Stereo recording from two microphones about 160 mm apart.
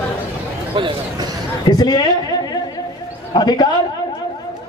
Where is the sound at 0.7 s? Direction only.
30° right (ahead or behind).